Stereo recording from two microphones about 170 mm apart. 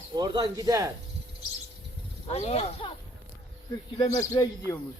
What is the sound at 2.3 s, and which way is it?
Speech, 40° left (ahead or behind).